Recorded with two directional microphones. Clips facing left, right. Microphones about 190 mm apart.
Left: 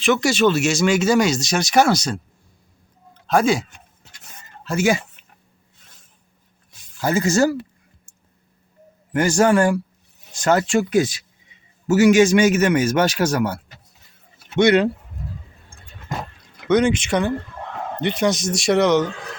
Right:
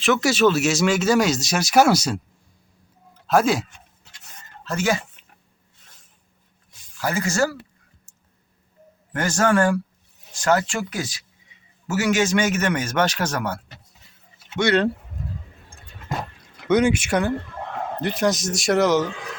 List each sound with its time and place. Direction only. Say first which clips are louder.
0.0 s speech: left 1 dB; centre (ahead or behind)
3.2 s speech: left 1 dB; centre (ahead or behind)
4.6 s speech: left 4 dB; 10° left (ahead or behind)
7.0 s speech: left 5 dB; 25° left (ahead or behind)
9.1 s a man's voice: left 4 dB; 10° left (ahead or behind)
14.6 s a man's voice: left 5 dB; 15° left (ahead or behind)
16.6 s speech: left 1 dB; 10° right (ahead or behind)